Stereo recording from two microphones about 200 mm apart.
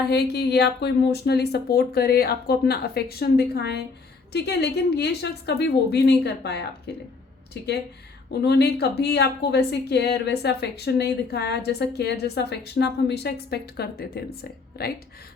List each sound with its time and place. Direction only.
0.0 s a woman's voice: 55° left (ahead or behind)